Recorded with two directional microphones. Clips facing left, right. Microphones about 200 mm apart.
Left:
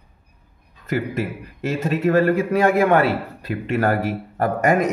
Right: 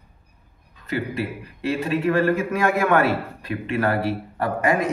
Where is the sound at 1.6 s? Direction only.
40° left (ahead or behind).